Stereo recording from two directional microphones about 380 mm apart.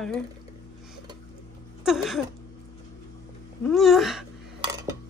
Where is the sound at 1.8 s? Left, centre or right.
Centre.